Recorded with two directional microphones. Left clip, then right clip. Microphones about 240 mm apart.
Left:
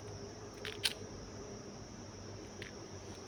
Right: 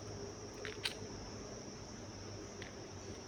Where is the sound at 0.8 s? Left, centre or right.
Centre.